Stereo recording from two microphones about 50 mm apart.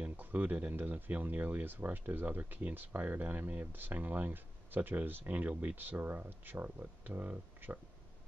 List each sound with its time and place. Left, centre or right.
0.0 s speech: right
3.4 s speech: right